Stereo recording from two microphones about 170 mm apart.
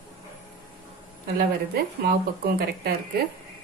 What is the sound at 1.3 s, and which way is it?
Speech, 60° right (ahead or behind).